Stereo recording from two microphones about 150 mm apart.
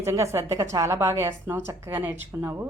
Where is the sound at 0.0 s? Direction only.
20° right (ahead or behind).